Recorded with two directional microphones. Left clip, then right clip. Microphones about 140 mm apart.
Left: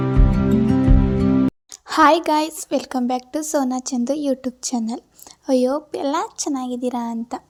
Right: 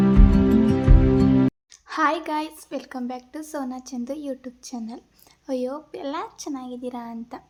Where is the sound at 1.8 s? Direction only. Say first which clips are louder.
Left 9 dB; 60° left (ahead or behind).